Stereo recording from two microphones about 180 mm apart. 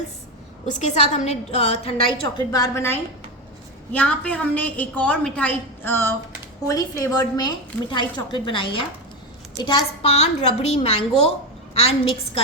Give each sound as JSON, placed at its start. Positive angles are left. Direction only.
{"t": 0.7, "sound": "a woman's voice", "side_deg": 40}
{"t": 2.2, "sound": "a woman's voice", "side_deg": 20}
{"t": 10.2, "sound": "a woman's voice", "side_deg": 35}